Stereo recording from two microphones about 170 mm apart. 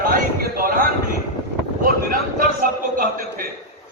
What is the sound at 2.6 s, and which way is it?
Speech, 60° right (ahead or behind).